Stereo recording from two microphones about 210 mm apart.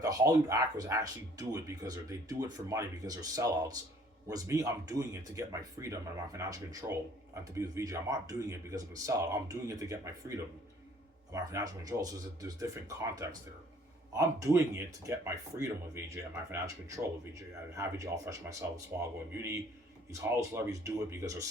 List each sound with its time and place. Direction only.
0.0 s speech: 15° right (ahead or behind)
17.7 s speech: 15° right (ahead or behind)